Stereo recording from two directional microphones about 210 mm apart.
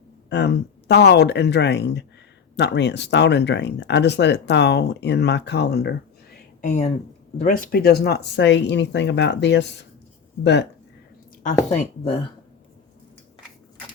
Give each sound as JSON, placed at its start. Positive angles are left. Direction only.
{"t": 0.3, "sound": "speech", "side_deg": 55}
{"t": 6.6, "sound": "speech", "side_deg": 35}
{"t": 11.7, "sound": "speech", "side_deg": 25}